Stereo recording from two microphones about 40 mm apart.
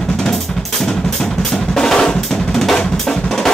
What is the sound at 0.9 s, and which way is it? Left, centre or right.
Drum, centre.